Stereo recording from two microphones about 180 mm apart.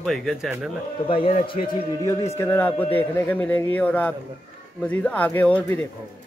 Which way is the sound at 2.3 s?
10° left (ahead or behind).